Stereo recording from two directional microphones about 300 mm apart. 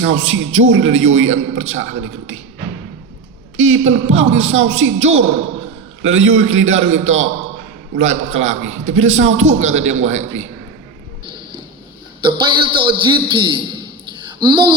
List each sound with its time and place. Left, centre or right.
0.0 s a man's voice: right
3.6 s a man's voice: right
9.6 s a man's voice: right
12.2 s a man's voice: centre